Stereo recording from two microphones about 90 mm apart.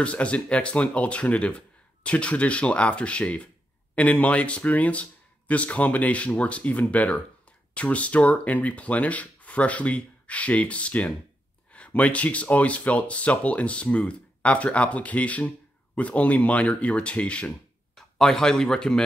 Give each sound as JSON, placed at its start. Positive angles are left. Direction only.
{"t": 0.0, "sound": "speech", "side_deg": 15}